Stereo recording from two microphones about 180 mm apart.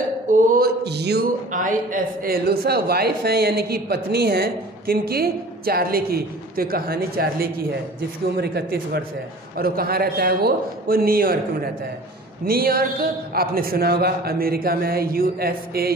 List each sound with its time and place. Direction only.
0.3 s a sound: 45° right (ahead or behind)
0.8 s a man's voice: 65° right (ahead or behind)
1.5 s a man's voice: 45° right (ahead or behind)